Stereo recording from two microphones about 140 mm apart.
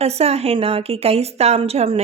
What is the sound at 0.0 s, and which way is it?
A woman's voice, 50° right (ahead or behind).